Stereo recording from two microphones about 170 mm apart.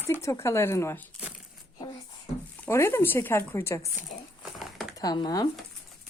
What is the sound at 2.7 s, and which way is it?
A woman's voice, 15° left (ahead or behind).